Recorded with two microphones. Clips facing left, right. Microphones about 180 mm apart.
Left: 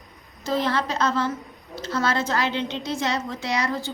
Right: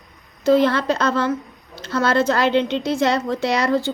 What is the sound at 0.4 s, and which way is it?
A woman's voice, 65° right (ahead or behind).